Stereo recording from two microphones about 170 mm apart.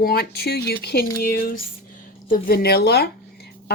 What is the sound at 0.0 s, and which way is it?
Speech, 65° left (ahead or behind).